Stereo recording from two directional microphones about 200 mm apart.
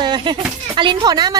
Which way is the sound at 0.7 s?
25° right (ahead or behind).